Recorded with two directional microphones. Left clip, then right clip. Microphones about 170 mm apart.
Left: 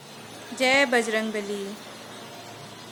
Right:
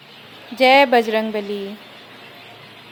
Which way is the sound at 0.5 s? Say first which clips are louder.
Right 8 dB; 20° right (ahead or behind).